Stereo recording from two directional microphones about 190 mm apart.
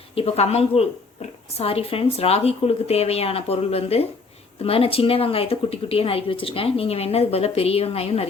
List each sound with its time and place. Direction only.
0.2 s a woman's voice: 30° left (ahead or behind)